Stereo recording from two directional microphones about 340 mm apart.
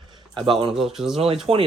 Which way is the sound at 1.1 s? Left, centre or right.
Centre.